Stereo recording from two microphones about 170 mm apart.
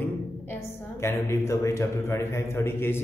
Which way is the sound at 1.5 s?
15° left (ahead or behind).